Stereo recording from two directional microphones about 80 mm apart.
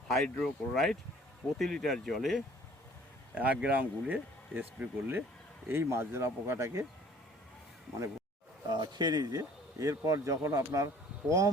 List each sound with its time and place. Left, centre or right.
0.1 s speech: centre
3.3 s speech: centre; by 6.8 s right
8.7 s speech: right
9.3 s speech: right